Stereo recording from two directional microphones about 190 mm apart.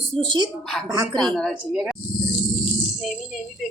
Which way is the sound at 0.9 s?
20° right (ahead or behind).